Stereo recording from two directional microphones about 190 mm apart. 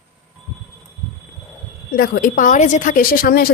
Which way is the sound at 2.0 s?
50° left (ahead or behind).